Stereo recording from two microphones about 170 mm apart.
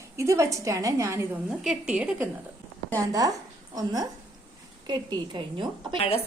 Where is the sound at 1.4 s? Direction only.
5° right (ahead or behind).